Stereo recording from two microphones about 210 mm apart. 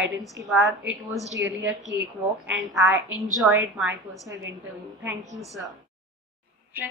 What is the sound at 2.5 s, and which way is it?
A woman's voice, centre (ahead or behind).